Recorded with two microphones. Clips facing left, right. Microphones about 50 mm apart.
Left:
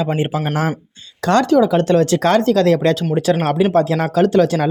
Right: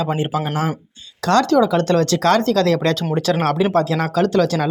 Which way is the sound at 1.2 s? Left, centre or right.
Left.